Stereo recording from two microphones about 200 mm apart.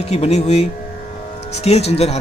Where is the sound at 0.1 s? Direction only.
30° left (ahead or behind).